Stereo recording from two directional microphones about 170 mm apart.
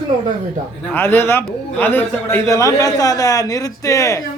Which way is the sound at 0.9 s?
10° left (ahead or behind).